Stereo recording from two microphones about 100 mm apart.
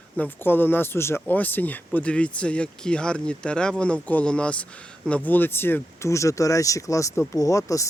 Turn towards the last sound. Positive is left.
turn(degrees=35)  # may be behind; listen again after turning